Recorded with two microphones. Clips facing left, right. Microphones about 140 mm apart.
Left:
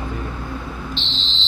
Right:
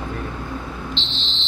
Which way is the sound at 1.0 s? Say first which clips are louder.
Even; 50° left (ahead or behind).